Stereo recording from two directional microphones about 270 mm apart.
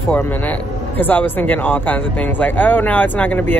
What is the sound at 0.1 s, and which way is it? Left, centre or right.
A man's voice, centre.